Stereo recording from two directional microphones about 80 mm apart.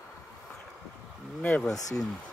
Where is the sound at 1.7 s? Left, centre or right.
Left.